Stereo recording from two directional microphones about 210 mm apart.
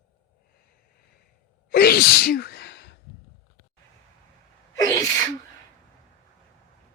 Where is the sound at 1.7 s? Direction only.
45° left (ahead or behind).